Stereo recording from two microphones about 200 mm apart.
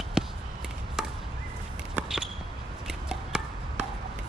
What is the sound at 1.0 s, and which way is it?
Chop, 5° right (ahead or behind).